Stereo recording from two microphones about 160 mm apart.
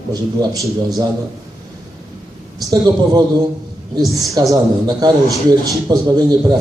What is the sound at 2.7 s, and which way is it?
Speech, 25° right (ahead or behind).